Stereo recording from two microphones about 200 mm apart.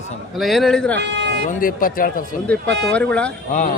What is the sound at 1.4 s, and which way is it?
Speech, 45° left (ahead or behind).